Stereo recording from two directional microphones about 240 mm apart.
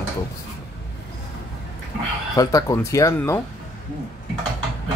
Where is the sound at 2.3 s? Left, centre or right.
Centre.